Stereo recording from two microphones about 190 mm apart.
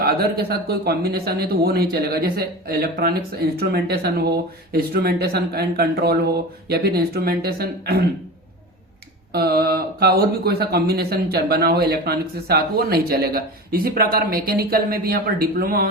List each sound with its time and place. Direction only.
0.0 s speech: 55° right (ahead or behind)
9.3 s speech: 55° right (ahead or behind)